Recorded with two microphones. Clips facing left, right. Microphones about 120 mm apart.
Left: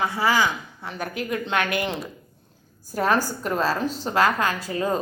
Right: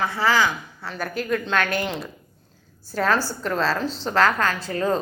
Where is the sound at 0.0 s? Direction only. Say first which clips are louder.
Right 1 dB; 15° left (ahead or behind).